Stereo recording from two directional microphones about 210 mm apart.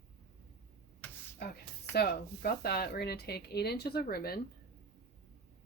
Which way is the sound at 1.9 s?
50° left (ahead or behind).